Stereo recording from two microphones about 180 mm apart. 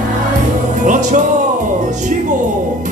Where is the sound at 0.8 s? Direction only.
45° right (ahead or behind).